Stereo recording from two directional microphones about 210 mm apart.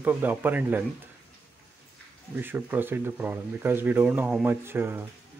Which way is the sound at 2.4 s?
10° right (ahead or behind).